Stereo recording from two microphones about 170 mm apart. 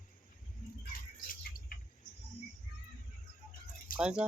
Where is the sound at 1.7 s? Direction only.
55° left (ahead or behind).